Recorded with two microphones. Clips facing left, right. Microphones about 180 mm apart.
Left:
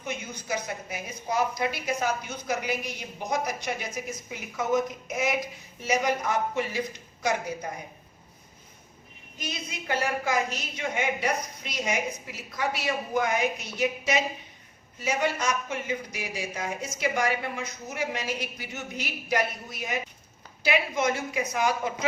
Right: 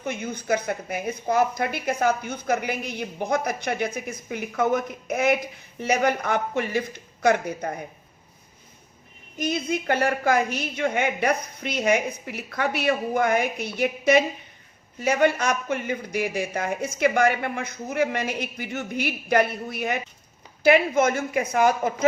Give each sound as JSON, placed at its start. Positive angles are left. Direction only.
{"t": 0.0, "sound": "a woman's voice", "side_deg": -55}
{"t": 9.4, "sound": "a woman's voice", "side_deg": -55}